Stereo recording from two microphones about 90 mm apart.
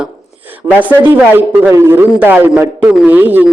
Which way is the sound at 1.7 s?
30° right (ahead or behind).